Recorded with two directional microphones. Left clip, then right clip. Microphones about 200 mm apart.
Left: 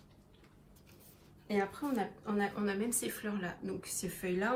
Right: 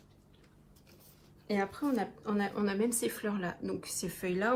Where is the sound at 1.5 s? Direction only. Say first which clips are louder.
Right 2 dB; 35° right (ahead or behind).